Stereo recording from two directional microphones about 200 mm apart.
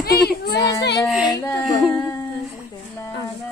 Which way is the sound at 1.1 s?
Centre (ahead or behind).